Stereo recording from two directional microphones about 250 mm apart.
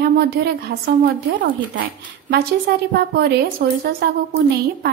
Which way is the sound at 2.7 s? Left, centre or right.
Right.